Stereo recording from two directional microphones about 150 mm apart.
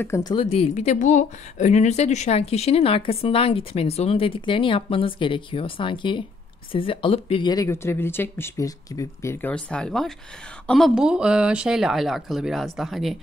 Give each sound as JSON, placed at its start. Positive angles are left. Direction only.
{"t": 0.0, "sound": "speech", "side_deg": 20}